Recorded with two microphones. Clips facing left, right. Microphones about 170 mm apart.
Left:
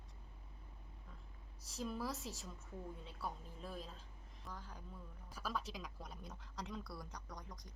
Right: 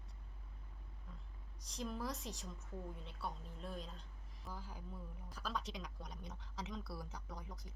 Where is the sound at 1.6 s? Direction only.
5° left (ahead or behind).